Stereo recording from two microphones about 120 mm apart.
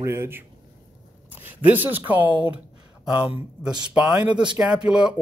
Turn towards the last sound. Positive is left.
turn(degrees=-5)  # may be behind; listen again after turning